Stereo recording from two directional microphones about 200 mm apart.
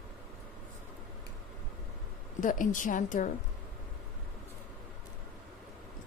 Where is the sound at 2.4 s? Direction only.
40° left (ahead or behind).